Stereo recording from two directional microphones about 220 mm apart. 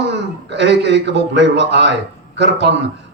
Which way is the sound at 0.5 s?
50° right (ahead or behind).